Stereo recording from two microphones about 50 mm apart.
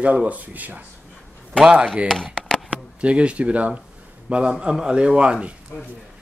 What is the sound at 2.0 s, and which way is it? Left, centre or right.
Speech, centre.